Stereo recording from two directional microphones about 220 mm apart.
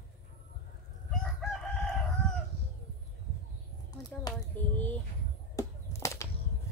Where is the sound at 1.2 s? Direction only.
Centre (ahead or behind).